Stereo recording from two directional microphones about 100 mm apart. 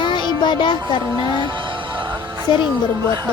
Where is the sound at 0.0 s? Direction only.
50° left (ahead or behind).